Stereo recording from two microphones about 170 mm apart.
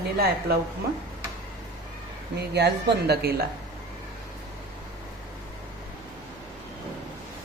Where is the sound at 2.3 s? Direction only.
75° right (ahead or behind).